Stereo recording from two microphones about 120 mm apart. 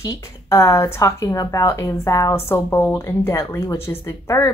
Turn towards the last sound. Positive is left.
turn(degrees=25)  # may be behind; listen again after turning